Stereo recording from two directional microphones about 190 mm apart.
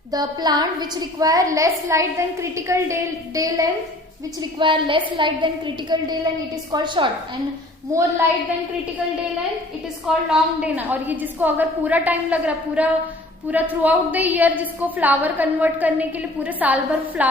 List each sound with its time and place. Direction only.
0.1 s a woman's voice: 20° right (ahead or behind)
10.1 s a woman's voice: 5° right (ahead or behind)